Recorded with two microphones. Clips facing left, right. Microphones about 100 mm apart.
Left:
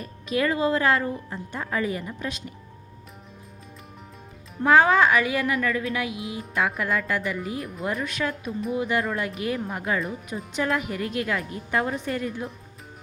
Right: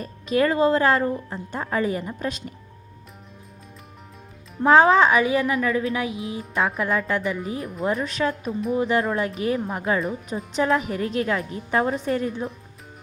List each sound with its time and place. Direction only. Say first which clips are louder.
0.0 s speech: right 4 dB; 35° right (ahead or behind)
4.6 s a woman's voice: right 3 dB; 25° right (ahead or behind)